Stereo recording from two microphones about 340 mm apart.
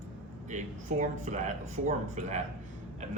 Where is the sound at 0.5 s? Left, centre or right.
Right.